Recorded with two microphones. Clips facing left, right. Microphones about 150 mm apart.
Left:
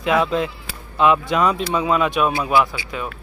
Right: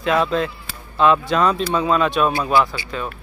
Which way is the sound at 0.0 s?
15° left (ahead or behind).